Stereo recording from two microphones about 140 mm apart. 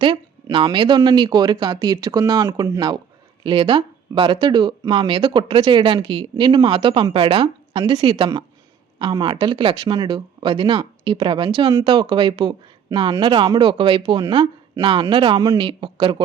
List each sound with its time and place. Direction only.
0.0 s speech: 35° right (ahead or behind)